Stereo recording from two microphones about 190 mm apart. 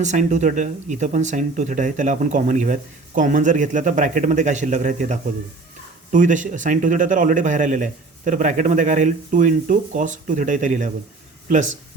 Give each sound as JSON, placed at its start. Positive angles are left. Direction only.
{"t": 0.0, "sound": "speech", "side_deg": -40}